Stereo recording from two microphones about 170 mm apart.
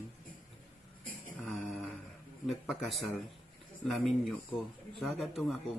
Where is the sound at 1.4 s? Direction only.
5° left (ahead or behind).